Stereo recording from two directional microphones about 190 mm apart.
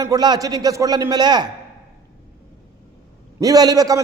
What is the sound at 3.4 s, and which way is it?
Speech, 20° right (ahead or behind).